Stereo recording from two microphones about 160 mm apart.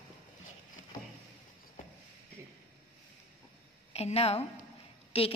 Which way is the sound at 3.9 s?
40° left (ahead or behind).